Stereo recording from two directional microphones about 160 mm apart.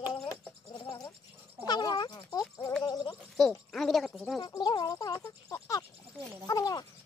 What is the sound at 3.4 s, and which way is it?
Speech, centre (ahead or behind).